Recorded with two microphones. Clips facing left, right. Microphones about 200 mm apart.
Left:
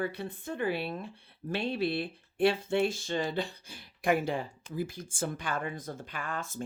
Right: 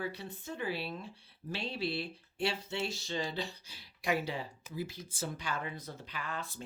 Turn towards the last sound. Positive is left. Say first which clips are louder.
# left 4 dB
turn(degrees=50)  # may be behind; listen again after turning